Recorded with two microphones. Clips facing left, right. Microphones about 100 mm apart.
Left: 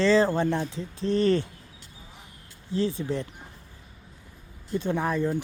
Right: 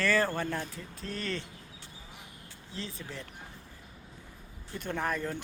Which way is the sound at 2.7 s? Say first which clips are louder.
Left 15 dB; 35° left (ahead or behind).